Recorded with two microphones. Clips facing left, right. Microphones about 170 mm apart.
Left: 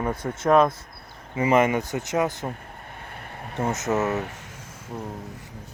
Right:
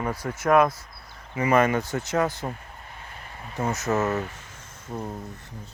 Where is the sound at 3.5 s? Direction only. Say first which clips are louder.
Left 1 dB; 25° left (ahead or behind).